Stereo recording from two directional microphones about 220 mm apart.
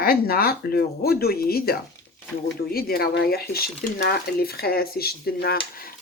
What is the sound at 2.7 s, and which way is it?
Speech, 45° left (ahead or behind).